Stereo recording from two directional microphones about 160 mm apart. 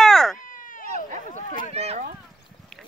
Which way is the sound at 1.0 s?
55° right (ahead or behind).